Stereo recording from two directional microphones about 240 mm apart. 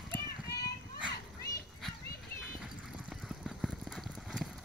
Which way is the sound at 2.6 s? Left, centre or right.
Centre.